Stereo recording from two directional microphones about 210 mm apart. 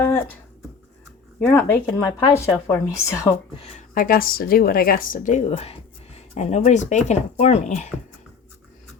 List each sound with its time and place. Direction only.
1.4 s speech: 10° left (ahead or behind)
3.6 s a woman's voice: 40° left (ahead or behind)